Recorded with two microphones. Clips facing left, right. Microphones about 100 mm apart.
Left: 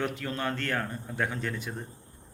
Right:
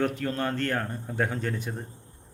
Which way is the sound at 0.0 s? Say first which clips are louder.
Right 4 dB; 40° right (ahead or behind).